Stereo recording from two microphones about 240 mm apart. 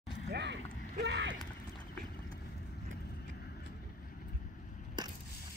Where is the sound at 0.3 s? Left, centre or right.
Right.